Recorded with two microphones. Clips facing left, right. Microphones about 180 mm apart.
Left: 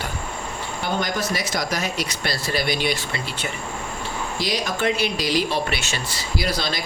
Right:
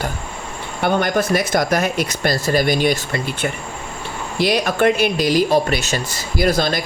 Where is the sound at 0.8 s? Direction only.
60° right (ahead or behind).